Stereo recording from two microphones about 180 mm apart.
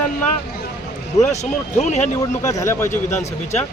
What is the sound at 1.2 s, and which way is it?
Speech, 40° left (ahead or behind).